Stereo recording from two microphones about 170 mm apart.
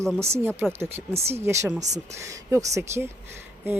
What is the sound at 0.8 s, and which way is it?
Speech, 40° right (ahead or behind).